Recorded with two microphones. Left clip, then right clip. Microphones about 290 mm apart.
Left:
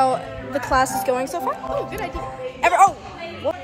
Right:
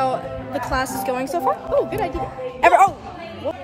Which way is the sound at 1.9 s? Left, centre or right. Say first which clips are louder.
Right 4 dB; right.